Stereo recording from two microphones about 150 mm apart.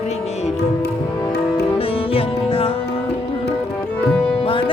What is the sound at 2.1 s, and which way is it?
Music, 40° left (ahead or behind).